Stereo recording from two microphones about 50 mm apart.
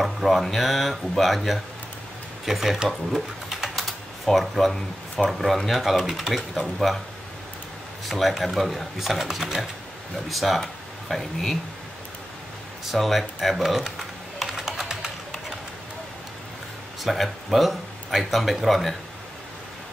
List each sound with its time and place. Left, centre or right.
0.0 s speech: centre
2.9 s typing: centre
5.3 s speech: centre
8.1 s speech: centre
12.9 s speech: centre
14.4 s typing: centre
17.0 s speech: centre